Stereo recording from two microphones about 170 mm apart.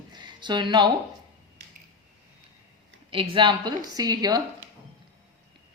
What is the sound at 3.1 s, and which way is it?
A woman's voice, 30° right (ahead or behind).